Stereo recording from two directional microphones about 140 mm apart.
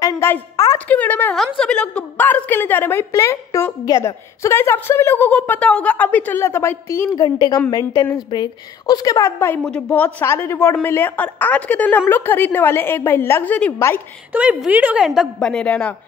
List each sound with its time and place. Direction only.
0.0 s a woman's voice: 20° left (ahead or behind)
9.6 s a woman's voice: 5° left (ahead or behind)
14.3 s a woman's voice: 10° right (ahead or behind)
15.3 s a woman's voice: 5° left (ahead or behind)